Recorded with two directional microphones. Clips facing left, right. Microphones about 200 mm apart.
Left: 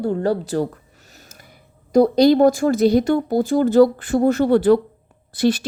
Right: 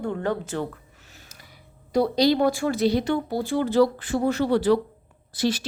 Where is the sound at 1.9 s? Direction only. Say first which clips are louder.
Left 7 dB; 50° left (ahead or behind).